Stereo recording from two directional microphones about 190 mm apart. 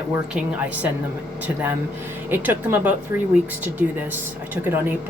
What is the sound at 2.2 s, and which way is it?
Speech, 10° right (ahead or behind).